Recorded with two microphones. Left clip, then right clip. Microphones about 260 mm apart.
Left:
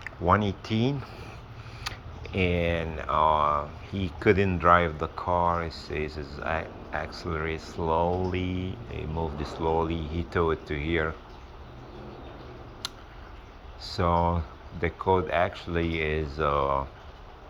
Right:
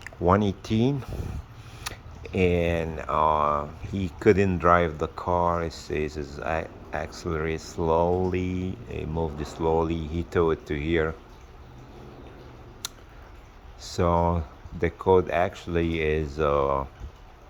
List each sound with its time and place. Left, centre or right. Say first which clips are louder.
0.0 s speech: right 2 dB; right
12.8 s tick-tock: left 1 dB; right
13.8 s speech: right 1 dB; right